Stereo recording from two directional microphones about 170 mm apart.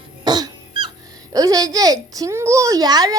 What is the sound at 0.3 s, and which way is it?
Cough, 25° right (ahead or behind).